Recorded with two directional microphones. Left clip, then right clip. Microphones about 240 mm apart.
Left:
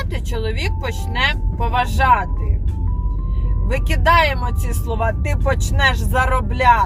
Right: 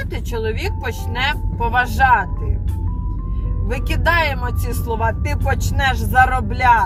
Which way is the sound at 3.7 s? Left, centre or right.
Left.